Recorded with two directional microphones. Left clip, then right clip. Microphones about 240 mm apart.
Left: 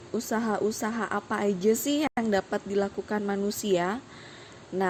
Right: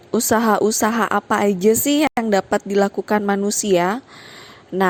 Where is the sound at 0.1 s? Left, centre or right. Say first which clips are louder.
Right 12 dB; right.